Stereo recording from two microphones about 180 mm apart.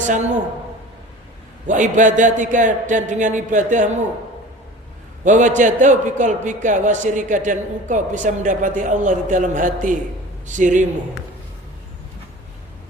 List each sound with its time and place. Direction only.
1.6 s a man's voice: 45° right (ahead or behind)
5.2 s a man's voice: 45° right (ahead or behind)